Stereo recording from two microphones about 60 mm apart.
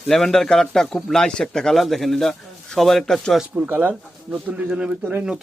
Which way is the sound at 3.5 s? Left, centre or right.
Right.